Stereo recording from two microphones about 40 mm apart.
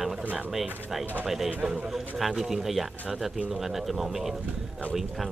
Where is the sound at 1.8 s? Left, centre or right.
Centre.